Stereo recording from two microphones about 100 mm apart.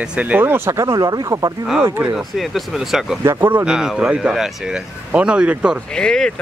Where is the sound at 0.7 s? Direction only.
35° right (ahead or behind).